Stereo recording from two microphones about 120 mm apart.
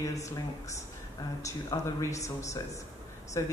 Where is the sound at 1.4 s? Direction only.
25° left (ahead or behind).